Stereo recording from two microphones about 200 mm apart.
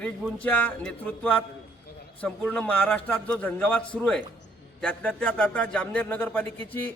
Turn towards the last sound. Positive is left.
turn(degrees=10)  # may be behind; listen again after turning